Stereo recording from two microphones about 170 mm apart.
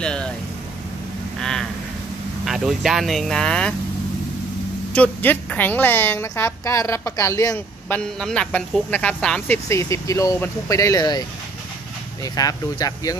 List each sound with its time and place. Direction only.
0.0 s vehicle: 5° left (ahead or behind)
1.4 s vehicle: 5° left (ahead or behind)
2.4 s speech: centre (ahead or behind)
4.9 s a woman's voice: 10° left (ahead or behind)
9.7 s speech: 15° left (ahead or behind)